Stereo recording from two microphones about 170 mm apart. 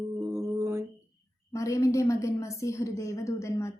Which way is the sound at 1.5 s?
20° left (ahead or behind).